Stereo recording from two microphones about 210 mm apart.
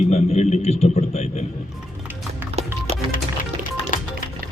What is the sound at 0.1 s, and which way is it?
A man's voice, 30° left (ahead or behind).